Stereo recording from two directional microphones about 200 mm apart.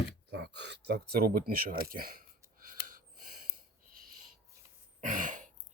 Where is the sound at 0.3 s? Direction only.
60° right (ahead or behind).